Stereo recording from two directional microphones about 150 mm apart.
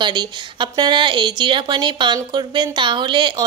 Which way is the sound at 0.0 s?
30° right (ahead or behind).